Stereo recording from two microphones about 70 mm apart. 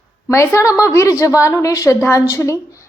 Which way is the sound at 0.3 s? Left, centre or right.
Left.